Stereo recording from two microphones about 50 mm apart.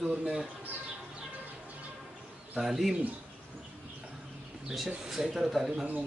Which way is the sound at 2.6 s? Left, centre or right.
Centre.